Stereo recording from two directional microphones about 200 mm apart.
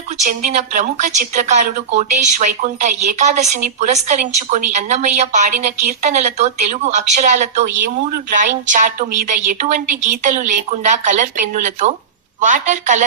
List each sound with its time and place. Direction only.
0.2 s speech: 35° right (ahead or behind)